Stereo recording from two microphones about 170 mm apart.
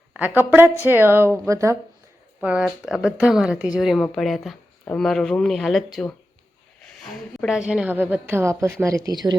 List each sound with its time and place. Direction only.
0.1 s a woman's voice: 10° right (ahead or behind)
2.4 s a woman's voice: 5° right (ahead or behind); by 9.3 s 25° right (ahead or behind)